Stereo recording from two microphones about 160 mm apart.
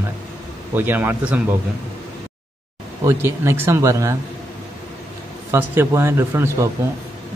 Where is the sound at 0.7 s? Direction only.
15° right (ahead or behind).